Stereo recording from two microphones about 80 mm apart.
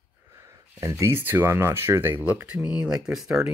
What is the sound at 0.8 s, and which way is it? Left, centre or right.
Speech, right.